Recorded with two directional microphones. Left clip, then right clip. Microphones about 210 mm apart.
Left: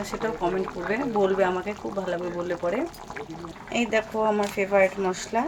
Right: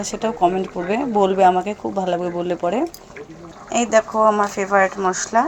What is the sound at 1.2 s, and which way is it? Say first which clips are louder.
Speech: right 10 dB; 20° right (ahead or behind).